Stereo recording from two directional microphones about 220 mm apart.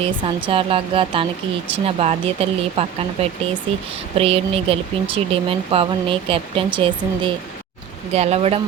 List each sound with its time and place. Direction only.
0.0 s speech: 20° right (ahead or behind)